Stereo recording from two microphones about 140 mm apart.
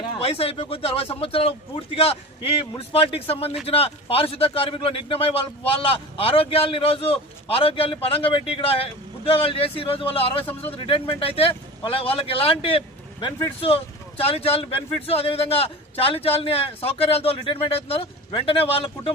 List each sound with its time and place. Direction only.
0.2 s speech: 45° left (ahead or behind)